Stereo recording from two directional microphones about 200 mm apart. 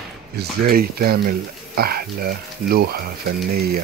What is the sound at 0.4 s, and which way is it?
Speech, 50° right (ahead or behind).